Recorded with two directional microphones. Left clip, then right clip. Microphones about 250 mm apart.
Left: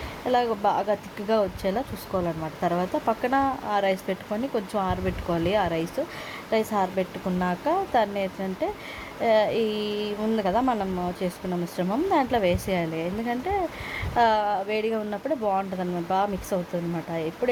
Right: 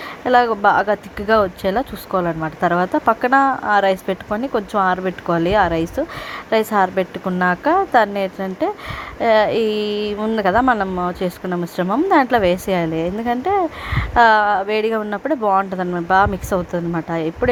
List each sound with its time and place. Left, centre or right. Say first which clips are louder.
0.3 s speech: right 9 dB; centre